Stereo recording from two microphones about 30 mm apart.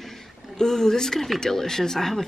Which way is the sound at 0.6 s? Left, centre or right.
Centre.